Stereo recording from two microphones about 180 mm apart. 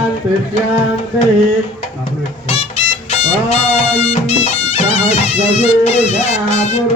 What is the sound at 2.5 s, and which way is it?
Music, 35° left (ahead or behind).